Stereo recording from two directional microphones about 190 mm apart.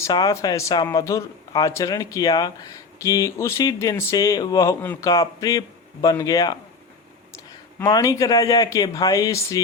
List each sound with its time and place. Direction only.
0.0 s speech: 20° left (ahead or behind)
7.9 s speech: 20° left (ahead or behind)